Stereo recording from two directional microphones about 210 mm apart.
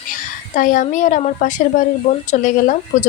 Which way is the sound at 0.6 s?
40° left (ahead or behind).